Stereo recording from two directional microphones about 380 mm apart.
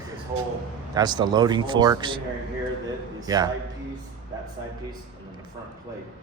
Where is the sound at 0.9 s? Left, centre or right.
Centre.